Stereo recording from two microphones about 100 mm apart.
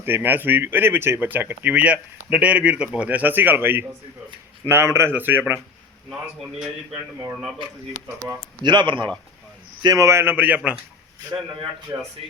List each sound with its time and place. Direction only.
0.0 s speech: 20° right (ahead or behind)
6.1 s a man's voice: 5° right (ahead or behind)
8.6 s speech: 50° right (ahead or behind)
9.8 s speech: 40° right (ahead or behind)
10.1 s a man's voice: 25° right (ahead or behind)
11.9 s speech: 30° right (ahead or behind)